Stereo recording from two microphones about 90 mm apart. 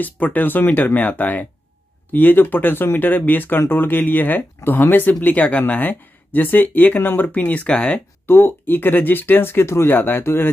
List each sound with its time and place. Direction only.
0.0 s speech: 20° left (ahead or behind)
8.3 s speech: 25° left (ahead or behind)